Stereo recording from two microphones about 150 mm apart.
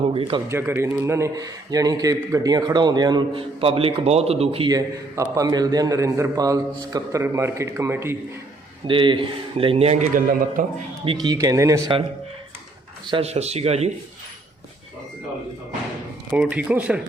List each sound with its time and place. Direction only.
0.0 s speech: 40° right (ahead or behind)
0.4 s speech: 15° right (ahead or behind); by 4.7 s 40° right (ahead or behind)
4.7 s speech: 20° right (ahead or behind)
8.9 s speech: 35° right (ahead or behind)
10.1 s a man's voice: 65° right (ahead or behind)
11.0 s speech: 35° right (ahead or behind)
13.1 s speech: 40° right (ahead or behind)
16.3 s speech: 5° right (ahead or behind)